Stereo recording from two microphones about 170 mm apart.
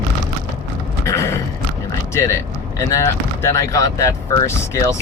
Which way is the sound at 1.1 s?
15° left (ahead or behind).